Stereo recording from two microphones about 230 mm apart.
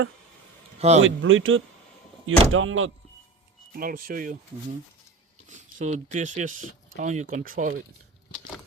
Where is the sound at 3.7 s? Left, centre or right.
Right.